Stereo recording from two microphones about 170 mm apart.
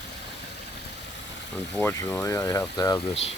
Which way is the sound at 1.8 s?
15° left (ahead or behind).